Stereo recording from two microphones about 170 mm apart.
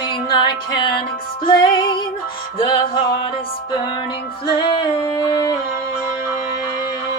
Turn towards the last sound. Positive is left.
turn(degrees=25)  # may be behind; listen again after turning